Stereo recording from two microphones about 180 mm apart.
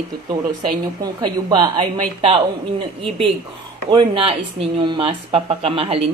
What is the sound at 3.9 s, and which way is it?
Speech, 30° right (ahead or behind).